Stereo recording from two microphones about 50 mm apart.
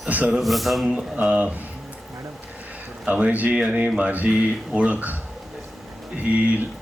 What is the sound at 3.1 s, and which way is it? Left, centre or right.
Speech, right.